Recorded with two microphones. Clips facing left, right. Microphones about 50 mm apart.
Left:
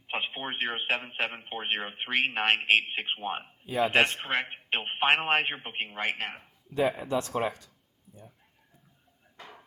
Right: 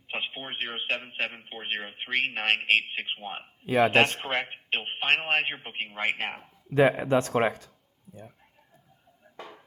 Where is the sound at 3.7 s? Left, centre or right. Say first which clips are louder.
Right 5 dB; right.